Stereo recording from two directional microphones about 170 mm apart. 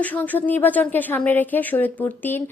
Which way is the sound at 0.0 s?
10° left (ahead or behind).